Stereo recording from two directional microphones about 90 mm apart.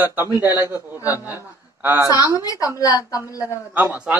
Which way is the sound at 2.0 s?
50° left (ahead or behind).